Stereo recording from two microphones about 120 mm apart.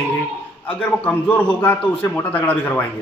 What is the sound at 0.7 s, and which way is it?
A man's voice, 10° left (ahead or behind).